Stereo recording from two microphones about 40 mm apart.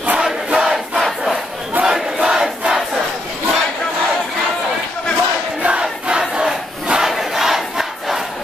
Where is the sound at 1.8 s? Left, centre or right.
Right.